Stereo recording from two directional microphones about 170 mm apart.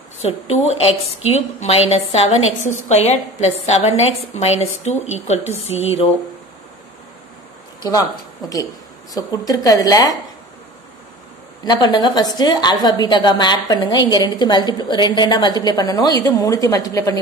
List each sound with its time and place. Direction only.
0.2 s a woman's voice: 40° left (ahead or behind)
7.8 s a woman's voice: 20° left (ahead or behind)
11.6 s a woman's voice: 25° left (ahead or behind)